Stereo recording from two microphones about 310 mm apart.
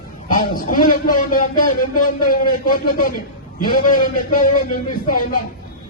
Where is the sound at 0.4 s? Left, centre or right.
Left.